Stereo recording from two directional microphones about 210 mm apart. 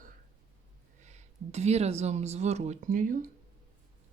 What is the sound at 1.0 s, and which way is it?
Speech, 30° right (ahead or behind).